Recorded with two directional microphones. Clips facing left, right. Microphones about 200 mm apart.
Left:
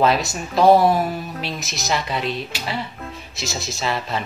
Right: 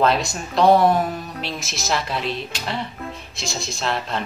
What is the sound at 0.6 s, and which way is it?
Speech, 5° left (ahead or behind).